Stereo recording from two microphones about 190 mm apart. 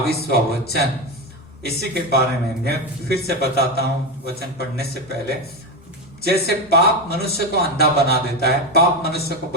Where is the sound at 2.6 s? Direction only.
55° right (ahead or behind).